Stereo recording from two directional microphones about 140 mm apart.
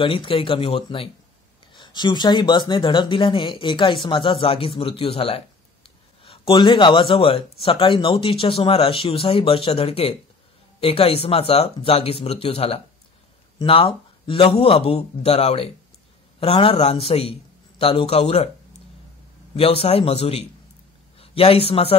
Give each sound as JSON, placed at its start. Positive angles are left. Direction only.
{"t": 0.0, "sound": "a man's voice", "side_deg": 40}